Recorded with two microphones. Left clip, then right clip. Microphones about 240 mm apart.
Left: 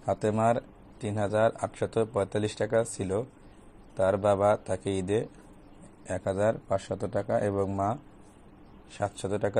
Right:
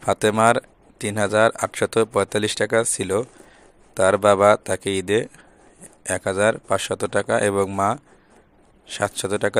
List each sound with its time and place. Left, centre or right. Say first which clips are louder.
0.0 s a man's voice: right 9 dB; right